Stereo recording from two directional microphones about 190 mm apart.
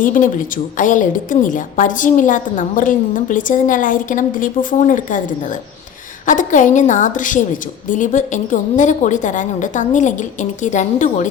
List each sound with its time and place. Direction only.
0.0 s a woman's voice: 45° left (ahead or behind)